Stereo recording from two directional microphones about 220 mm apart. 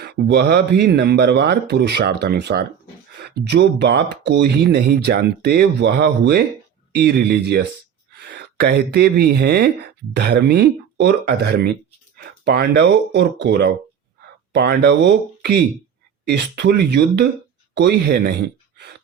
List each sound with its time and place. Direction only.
0.0 s speech: 50° right (ahead or behind)